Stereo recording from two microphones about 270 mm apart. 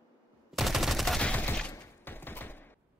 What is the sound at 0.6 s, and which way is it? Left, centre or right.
Gunshot, centre.